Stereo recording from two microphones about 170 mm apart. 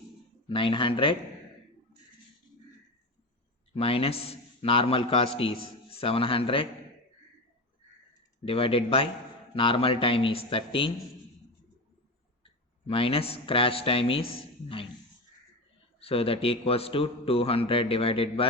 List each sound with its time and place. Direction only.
0.4 s speech: 30° left (ahead or behind)
3.8 s a man's voice: 35° left (ahead or behind)
8.4 s a man's voice: 30° left (ahead or behind)
12.9 s a man's voice: 35° left (ahead or behind)
16.0 s a man's voice: 35° left (ahead or behind)